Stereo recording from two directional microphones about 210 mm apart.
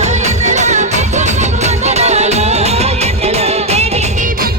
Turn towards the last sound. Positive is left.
turn(degrees=-35)  # may be behind; listen again after turning